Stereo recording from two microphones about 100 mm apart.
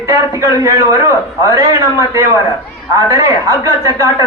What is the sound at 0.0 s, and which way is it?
A man's voice, 30° right (ahead or behind).